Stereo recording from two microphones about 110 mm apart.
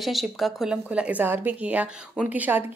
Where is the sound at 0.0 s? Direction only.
Centre (ahead or behind).